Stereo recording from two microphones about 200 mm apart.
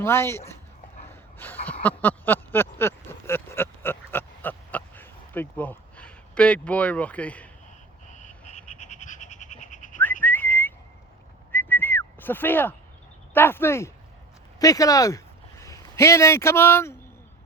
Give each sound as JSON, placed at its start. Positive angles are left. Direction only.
{"t": 0.0, "sound": "speech", "side_deg": 10}
{"t": 1.1, "sound": "a sound", "side_deg": 10}
{"t": 8.0, "sound": "frog", "side_deg": 35}
{"t": 10.0, "sound": "whistling", "side_deg": 10}
{"t": 13.3, "sound": "speech", "side_deg": 10}